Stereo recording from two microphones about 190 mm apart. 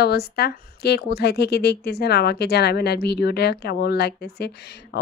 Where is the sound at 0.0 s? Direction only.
55° left (ahead or behind).